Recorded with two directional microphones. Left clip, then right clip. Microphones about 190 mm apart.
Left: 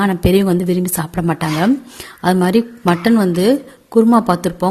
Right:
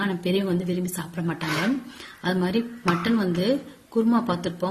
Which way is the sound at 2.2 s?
50° left (ahead or behind).